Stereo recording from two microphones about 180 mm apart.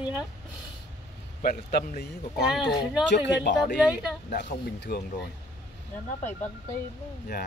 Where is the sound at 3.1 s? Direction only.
75° left (ahead or behind).